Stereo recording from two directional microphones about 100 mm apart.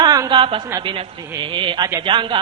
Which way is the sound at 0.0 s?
45° right (ahead or behind).